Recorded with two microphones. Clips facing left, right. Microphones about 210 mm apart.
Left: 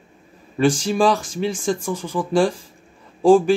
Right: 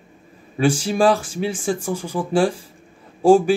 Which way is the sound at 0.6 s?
10° right (ahead or behind).